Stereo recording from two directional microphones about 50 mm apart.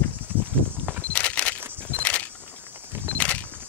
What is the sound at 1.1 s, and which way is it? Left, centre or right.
Single-lens reflex camera, left.